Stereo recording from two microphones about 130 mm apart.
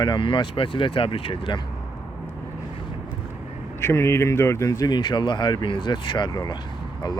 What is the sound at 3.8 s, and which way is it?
Speech, 20° left (ahead or behind).